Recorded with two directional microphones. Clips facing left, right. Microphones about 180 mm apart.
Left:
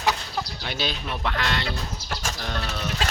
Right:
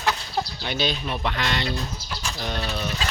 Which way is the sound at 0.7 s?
5° left (ahead or behind).